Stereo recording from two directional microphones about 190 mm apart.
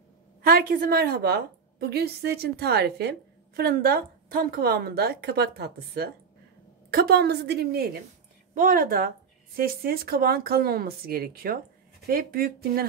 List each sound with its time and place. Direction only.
0.4 s a woman's voice: 50° right (ahead or behind)